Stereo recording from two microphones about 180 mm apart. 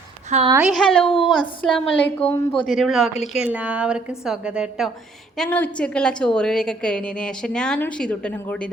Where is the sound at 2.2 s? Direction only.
35° left (ahead or behind).